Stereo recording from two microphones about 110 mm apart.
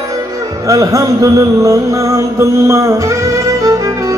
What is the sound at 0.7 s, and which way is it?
Mantra, 30° right (ahead or behind).